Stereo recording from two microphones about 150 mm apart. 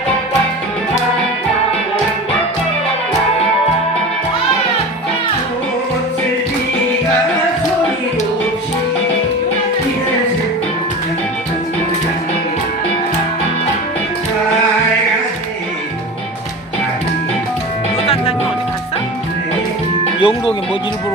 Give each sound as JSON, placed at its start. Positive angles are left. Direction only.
{"t": 18.0, "sound": "music", "side_deg": 40}
{"t": 20.2, "sound": "music", "side_deg": 35}